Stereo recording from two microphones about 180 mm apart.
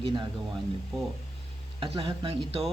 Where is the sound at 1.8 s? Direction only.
30° right (ahead or behind).